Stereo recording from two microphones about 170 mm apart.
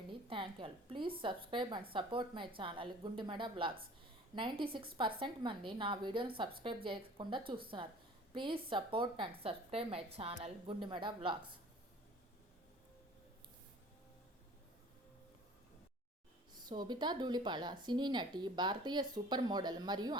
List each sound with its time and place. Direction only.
0.1 s a woman's voice: 30° right (ahead or behind)
16.6 s a woman's voice: 25° right (ahead or behind)